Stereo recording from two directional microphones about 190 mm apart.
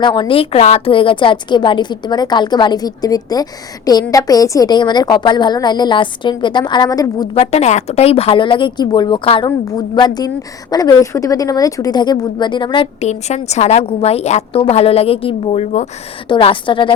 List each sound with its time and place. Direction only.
0.0 s a woman's voice: 25° left (ahead or behind)
7.3 s a woman's voice: 35° left (ahead or behind)